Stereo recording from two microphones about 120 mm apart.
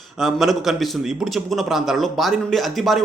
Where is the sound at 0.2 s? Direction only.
Centre (ahead or behind).